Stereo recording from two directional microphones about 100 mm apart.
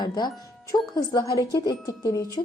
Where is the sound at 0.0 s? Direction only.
45° left (ahead or behind).